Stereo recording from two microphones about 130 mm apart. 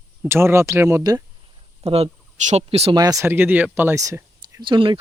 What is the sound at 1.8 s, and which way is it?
Speech, 50° right (ahead or behind).